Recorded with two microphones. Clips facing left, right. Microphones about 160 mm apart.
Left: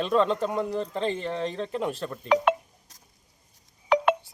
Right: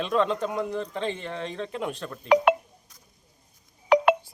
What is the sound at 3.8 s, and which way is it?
Telephone dialing, 5° right (ahead or behind).